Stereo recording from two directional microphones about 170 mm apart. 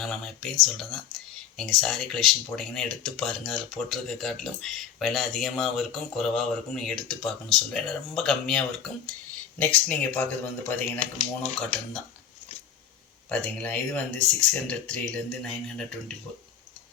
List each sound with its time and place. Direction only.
0.0 s speech: 5° left (ahead or behind)
1.5 s speech: centre (ahead or behind)
11.4 s speech: 45° left (ahead or behind)
13.3 s speech: 5° left (ahead or behind)